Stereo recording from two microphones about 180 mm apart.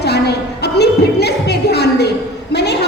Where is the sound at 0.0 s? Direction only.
65° left (ahead or behind).